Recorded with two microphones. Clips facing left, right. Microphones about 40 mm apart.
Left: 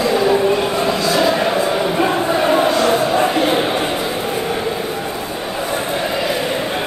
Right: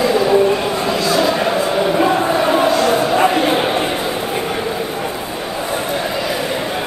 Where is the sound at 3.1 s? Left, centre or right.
Centre.